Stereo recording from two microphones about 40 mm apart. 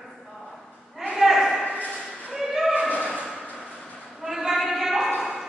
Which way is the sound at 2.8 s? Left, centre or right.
Left.